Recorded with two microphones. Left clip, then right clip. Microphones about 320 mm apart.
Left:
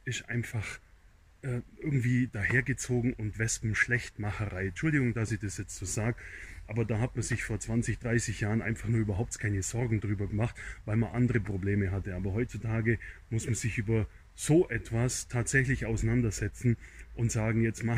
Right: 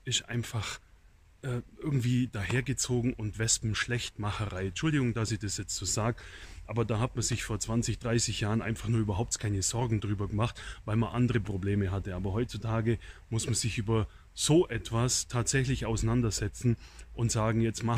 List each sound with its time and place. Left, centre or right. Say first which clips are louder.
0.0 s a man's voice: right 3 dB; centre
5.8 s speech: right 3 dB; centre
12.6 s speech: even; right
12.9 s speech: left 1 dB; centre
17.2 s speech: right 1 dB; centre